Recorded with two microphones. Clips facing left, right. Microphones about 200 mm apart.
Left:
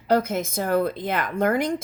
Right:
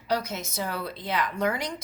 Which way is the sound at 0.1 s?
50° left (ahead or behind).